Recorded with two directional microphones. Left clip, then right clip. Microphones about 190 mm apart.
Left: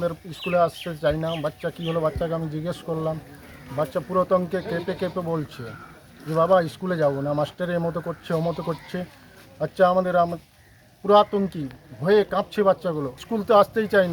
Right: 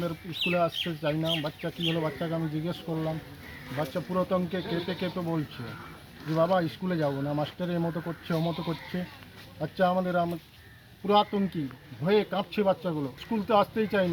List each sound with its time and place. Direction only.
0.5 s speech: 15° left (ahead or behind)